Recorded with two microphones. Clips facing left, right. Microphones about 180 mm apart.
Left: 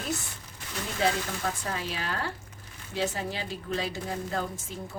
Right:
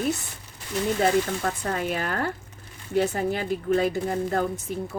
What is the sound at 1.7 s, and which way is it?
Speech, 55° right (ahead or behind).